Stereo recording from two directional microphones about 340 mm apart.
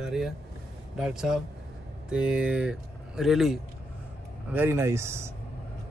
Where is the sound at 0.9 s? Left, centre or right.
Centre.